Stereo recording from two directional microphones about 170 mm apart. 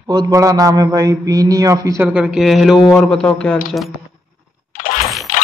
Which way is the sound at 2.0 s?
5° right (ahead or behind).